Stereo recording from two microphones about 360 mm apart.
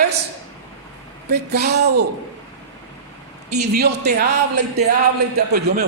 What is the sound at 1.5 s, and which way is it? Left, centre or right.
Speech, right.